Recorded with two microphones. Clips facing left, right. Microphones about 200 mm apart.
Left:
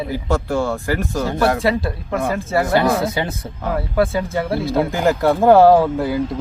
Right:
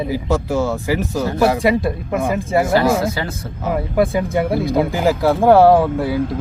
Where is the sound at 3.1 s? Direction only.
20° left (ahead or behind).